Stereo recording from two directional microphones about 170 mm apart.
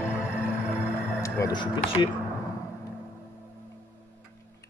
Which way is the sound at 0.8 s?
20° left (ahead or behind).